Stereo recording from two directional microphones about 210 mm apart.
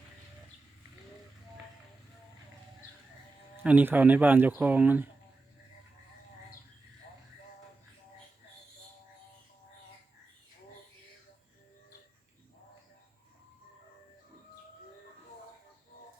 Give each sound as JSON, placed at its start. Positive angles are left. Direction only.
{"t": 3.6, "sound": "speech", "side_deg": -5}